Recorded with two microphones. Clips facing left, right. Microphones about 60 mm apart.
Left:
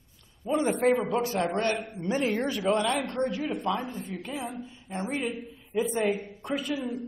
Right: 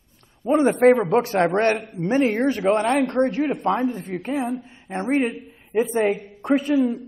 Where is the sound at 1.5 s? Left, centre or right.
Right.